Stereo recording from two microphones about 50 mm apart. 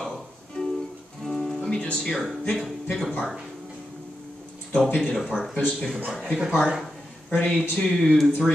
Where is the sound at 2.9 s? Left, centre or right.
Centre.